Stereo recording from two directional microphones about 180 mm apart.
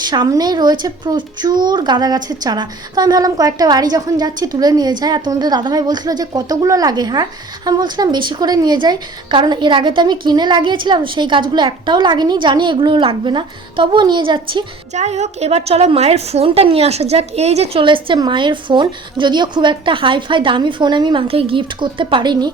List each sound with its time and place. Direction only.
0.0 s speech: 25° right (ahead or behind)